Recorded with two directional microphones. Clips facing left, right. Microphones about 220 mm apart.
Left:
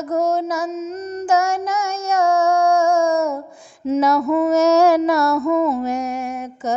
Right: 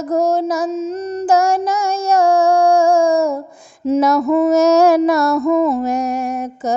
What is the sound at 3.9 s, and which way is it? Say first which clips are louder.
Female singing: right 3 dB; 45° right (ahead or behind).